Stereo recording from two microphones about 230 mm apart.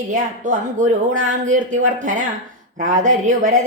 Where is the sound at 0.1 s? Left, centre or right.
Right.